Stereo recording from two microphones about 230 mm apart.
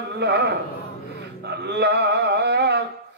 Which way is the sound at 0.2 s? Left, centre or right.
Right.